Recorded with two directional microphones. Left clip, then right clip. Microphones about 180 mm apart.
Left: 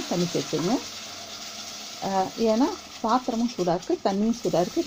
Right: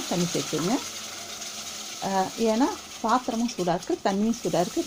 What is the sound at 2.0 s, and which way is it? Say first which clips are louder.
Speech: left 1 dB; 15° left (ahead or behind).